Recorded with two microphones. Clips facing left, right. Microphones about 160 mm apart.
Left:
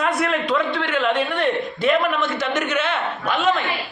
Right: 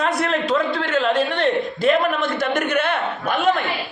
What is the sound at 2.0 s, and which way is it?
A man's voice, 50° right (ahead or behind).